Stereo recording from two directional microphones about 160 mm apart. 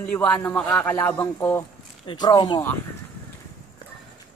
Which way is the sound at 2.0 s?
30° left (ahead or behind).